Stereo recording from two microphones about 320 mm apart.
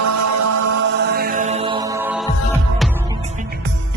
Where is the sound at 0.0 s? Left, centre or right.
Right.